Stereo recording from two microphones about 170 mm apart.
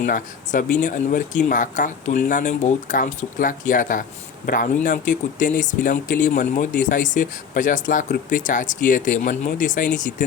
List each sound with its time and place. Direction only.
0.0 s speech: 50° left (ahead or behind)